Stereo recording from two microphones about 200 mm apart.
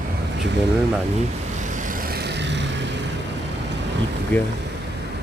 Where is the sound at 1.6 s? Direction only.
40° right (ahead or behind); by 3.0 s 60° right (ahead or behind).